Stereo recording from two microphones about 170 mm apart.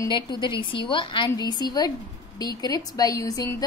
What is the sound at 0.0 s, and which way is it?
A woman's voice, 25° left (ahead or behind).